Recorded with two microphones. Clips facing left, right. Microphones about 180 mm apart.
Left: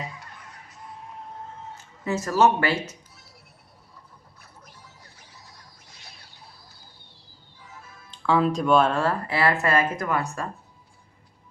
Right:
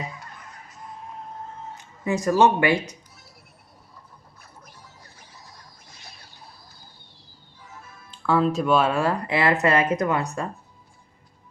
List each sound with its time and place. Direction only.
0.2 s fowl: 45° right (ahead or behind)
1.7 s speech: 15° right (ahead or behind)
4.4 s music: 45° right (ahead or behind)
8.3 s speech: centre (ahead or behind); by 10.4 s 25° right (ahead or behind)